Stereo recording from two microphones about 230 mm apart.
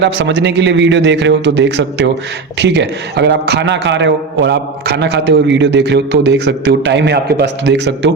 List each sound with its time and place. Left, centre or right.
0.0 s a man's voice: right